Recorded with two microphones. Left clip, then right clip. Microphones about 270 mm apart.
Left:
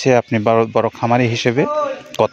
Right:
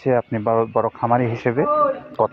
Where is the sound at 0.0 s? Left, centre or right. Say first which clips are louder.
Left 5 dB; left.